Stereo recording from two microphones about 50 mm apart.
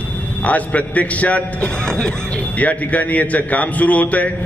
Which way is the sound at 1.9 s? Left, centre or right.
Centre.